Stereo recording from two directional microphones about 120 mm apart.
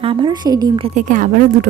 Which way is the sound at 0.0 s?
45° right (ahead or behind).